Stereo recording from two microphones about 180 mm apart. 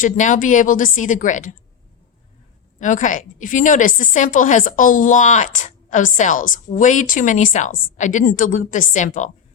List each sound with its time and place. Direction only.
0.0 s a woman's voice: 45° left (ahead or behind)
2.7 s a woman's voice: 45° left (ahead or behind)